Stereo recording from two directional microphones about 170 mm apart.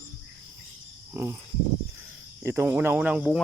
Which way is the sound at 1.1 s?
15° right (ahead or behind).